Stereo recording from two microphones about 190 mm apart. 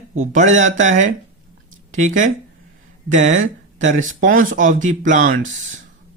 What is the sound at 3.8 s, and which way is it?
A man's voice, 40° right (ahead or behind).